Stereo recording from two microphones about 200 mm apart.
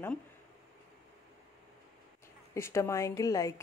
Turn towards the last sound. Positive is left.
turn(degrees=15)  # may be behind; listen again after turning